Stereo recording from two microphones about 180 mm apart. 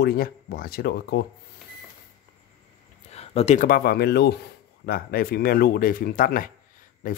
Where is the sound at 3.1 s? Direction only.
35° left (ahead or behind); by 6.5 s 50° left (ahead or behind).